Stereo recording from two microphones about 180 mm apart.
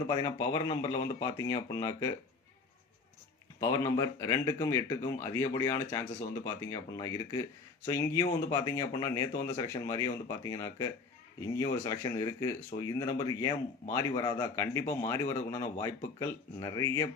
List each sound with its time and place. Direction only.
0.1 s speech: 25° left (ahead or behind)
3.6 s a man's voice: 20° left (ahead or behind)